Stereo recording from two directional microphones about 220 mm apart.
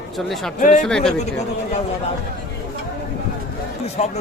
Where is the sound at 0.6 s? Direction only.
35° left (ahead or behind).